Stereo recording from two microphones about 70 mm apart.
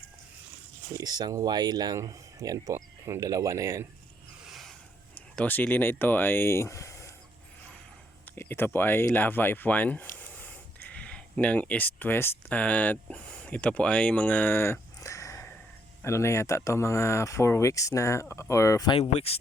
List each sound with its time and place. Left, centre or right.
0.9 s speech: right
2.0 s speech: right
4.4 s a sound: centre
5.4 s speech: left
8.4 s speech: left
12.5 s speech: centre; by 18.9 s left